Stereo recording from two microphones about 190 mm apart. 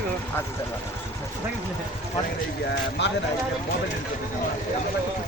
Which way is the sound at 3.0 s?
65° left (ahead or behind).